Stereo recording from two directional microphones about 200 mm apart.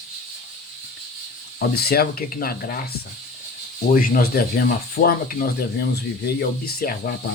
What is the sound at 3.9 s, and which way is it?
Speech, 45° left (ahead or behind).